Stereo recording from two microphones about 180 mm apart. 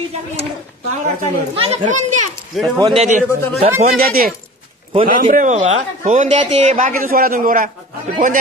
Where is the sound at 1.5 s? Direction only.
35° right (ahead or behind).